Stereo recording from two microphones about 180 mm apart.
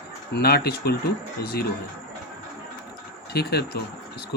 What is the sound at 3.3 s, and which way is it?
Speech, 65° left (ahead or behind).